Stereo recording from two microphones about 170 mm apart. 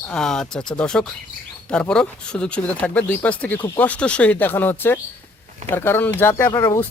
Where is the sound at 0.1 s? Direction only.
5° left (ahead or behind).